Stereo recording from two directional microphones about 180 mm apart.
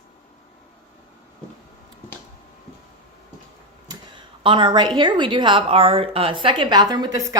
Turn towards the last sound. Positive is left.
turn(degrees=-20)  # may be behind; listen again after turning